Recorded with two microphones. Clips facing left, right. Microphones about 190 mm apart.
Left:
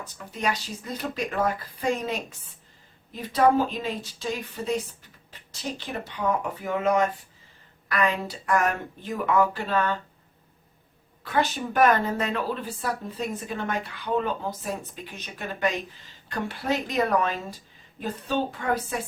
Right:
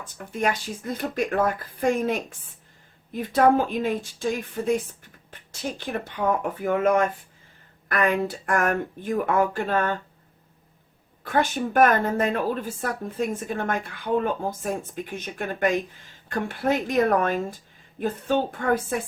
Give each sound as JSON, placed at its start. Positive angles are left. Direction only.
{"t": 0.0, "sound": "a woman's voice", "side_deg": -50}
{"t": 11.2, "sound": "a woman's voice", "side_deg": -50}